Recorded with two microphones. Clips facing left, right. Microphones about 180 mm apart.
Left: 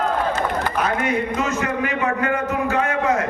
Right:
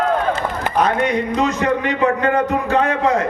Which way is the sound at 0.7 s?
35° right (ahead or behind).